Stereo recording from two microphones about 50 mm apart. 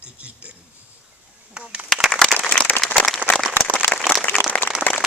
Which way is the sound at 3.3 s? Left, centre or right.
Left.